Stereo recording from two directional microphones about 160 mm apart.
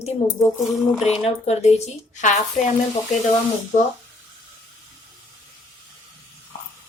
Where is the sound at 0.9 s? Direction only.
Centre (ahead or behind).